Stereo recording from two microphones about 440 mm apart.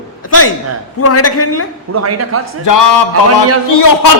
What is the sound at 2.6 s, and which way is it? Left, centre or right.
Speech, left.